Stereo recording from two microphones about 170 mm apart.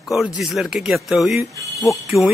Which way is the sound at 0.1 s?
Centre (ahead or behind).